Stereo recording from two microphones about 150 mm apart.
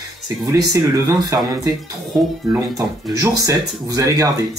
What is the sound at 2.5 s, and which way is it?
Speech, 20° right (ahead or behind).